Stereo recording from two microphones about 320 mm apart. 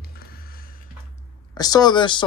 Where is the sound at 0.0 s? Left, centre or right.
Left.